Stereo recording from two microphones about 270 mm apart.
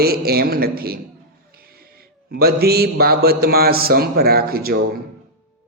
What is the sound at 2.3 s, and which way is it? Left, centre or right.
A man's voice, right.